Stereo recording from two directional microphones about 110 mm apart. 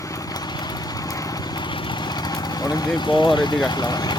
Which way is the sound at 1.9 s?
40° left (ahead or behind).